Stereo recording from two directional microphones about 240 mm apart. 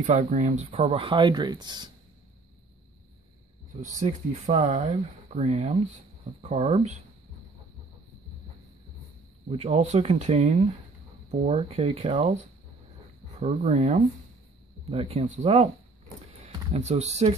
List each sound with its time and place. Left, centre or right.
0.0 s speech: right
3.8 s speech: right
9.5 s speech: right
13.4 s speech: right